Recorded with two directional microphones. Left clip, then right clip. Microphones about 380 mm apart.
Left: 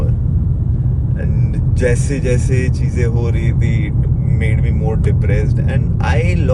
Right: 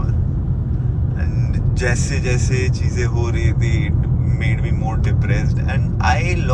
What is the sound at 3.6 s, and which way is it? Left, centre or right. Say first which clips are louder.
Speech: left 1 dB; centre.